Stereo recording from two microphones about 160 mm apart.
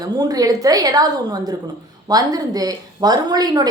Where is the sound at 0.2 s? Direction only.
25° right (ahead or behind).